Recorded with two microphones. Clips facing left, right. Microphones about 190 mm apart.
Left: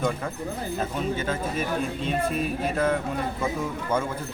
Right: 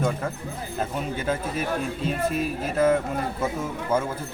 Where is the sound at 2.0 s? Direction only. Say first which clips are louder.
Right 2 dB; 5° right (ahead or behind).